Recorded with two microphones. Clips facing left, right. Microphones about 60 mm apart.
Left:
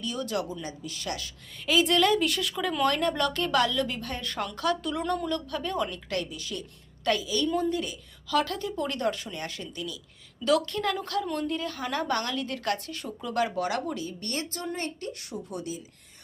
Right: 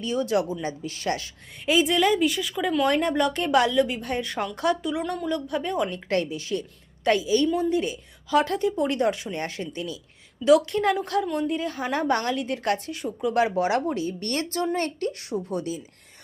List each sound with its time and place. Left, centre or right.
0.0 s a woman's voice: right
1.8 s a woman's voice: centre
2.9 s a woman's voice: centre
3.8 s a woman's voice: centre
4.0 s speech: right
4.3 s a woman's voice: centre
4.5 s speech: right
4.8 s a woman's voice: centre
5.9 s a woman's voice: right
9.4 s a woman's voice: right
10.4 s speech: centre
13.6 s a woman's voice: right
15.3 s a woman's voice: right